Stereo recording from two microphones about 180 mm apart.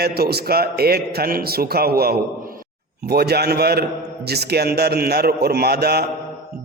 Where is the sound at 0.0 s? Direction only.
60° right (ahead or behind).